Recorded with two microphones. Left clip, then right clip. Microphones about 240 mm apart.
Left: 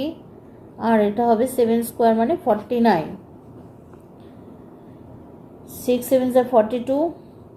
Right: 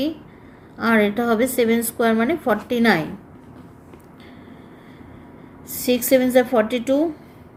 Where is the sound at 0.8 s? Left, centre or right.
Right.